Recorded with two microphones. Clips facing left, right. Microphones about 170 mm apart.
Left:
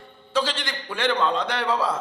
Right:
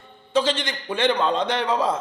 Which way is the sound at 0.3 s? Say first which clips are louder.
Right 4 dB; 20° right (ahead or behind).